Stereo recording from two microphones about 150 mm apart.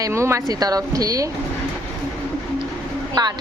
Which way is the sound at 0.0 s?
20° right (ahead or behind).